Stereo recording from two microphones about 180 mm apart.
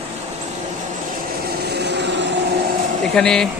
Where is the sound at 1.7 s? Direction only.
70° right (ahead or behind).